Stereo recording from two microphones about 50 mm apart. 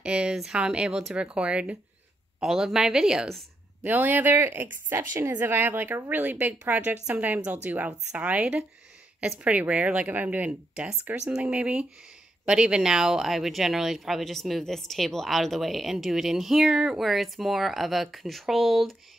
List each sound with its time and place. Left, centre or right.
0.0 s a woman's voice: right
2.4 s speech: centre
3.8 s a woman's voice: right
10.1 s speech: right
10.7 s a woman's voice: centre